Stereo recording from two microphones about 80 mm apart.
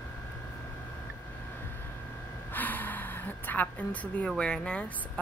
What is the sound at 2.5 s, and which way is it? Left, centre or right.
Gasp, left.